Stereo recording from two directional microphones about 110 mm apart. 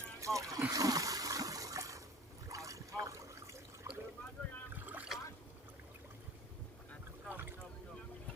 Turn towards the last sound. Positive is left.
turn(degrees=-20)  # may be behind; listen again after turning